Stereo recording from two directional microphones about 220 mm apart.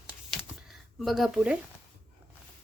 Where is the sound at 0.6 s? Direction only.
Centre (ahead or behind).